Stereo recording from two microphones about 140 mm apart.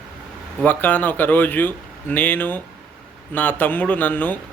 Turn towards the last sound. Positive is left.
turn(degrees=10)  # may be behind; listen again after turning